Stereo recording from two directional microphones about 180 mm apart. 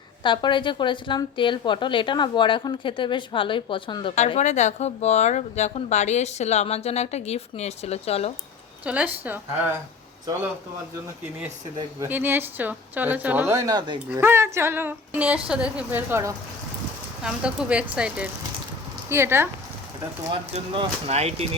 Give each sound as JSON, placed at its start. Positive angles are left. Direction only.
{"t": 0.2, "sound": "a woman's voice", "side_deg": 25}
{"t": 4.3, "sound": "speech", "side_deg": 40}
{"t": 8.8, "sound": "speech", "side_deg": -5}
{"t": 11.8, "sound": "speech", "side_deg": -15}
{"t": 14.1, "sound": "speech", "side_deg": -10}
{"t": 20.3, "sound": "speech", "side_deg": -35}